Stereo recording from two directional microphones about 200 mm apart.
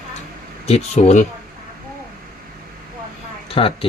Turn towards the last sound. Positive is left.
turn(degrees=25)  # may be behind; listen again after turning